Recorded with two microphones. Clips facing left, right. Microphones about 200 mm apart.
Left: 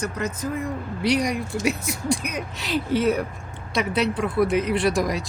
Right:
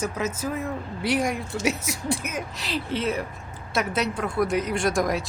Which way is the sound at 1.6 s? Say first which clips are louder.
Even; 75° right (ahead or behind).